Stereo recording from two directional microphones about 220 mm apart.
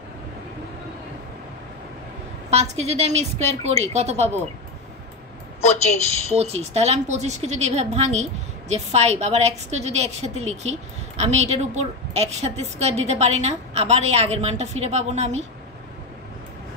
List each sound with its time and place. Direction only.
2.5 s a woman's voice: 30° right (ahead or behind)
6.3 s a woman's voice: 30° right (ahead or behind)